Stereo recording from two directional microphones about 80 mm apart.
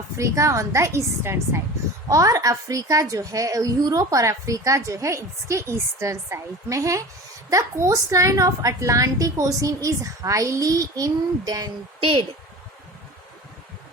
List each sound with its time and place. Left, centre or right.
0.2 s a woman's voice: right